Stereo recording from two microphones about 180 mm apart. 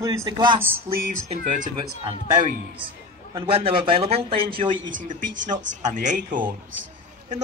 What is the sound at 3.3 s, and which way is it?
A man's voice, 30° right (ahead or behind).